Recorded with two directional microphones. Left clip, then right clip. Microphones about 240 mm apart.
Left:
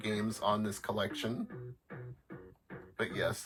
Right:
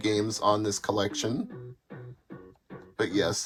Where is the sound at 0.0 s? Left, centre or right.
Right.